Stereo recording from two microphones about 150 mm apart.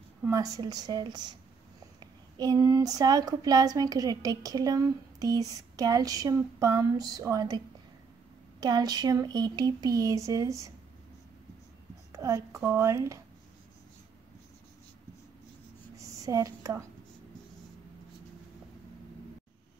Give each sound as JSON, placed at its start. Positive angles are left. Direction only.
{"t": 0.3, "sound": "speech", "side_deg": -25}
{"t": 12.1, "sound": "speech", "side_deg": -20}
{"t": 16.0, "sound": "a sound", "side_deg": -25}